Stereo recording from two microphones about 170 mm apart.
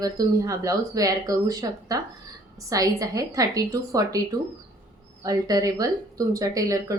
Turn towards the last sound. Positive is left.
turn(degrees=-20)  # may be behind; listen again after turning